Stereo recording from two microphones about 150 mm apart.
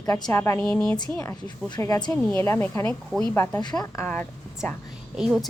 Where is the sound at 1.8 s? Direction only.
25° left (ahead or behind).